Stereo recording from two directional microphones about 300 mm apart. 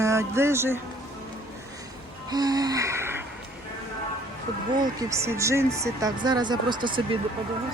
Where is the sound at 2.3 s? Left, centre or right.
Centre.